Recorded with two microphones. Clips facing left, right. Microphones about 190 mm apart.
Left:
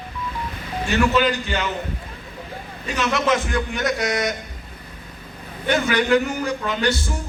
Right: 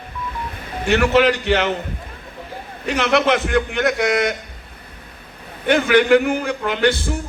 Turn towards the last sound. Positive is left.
turn(degrees=-55)  # may be behind; listen again after turning